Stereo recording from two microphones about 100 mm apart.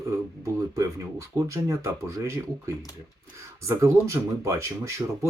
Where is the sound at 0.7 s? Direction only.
35° right (ahead or behind).